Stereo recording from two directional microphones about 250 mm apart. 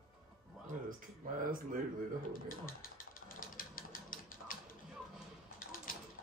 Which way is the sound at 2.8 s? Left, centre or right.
Left.